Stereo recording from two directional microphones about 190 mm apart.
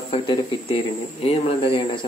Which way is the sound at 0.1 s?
30° left (ahead or behind).